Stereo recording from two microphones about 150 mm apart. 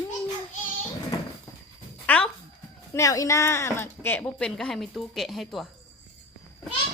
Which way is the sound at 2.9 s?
20° left (ahead or behind).